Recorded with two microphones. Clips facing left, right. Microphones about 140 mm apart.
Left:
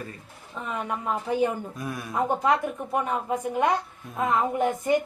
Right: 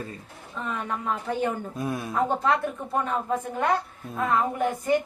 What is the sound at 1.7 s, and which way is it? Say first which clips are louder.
Speech: right 4 dB; 25° right (ahead or behind).